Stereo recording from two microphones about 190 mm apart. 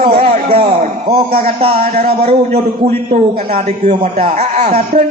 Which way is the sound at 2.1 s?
30° right (ahead or behind).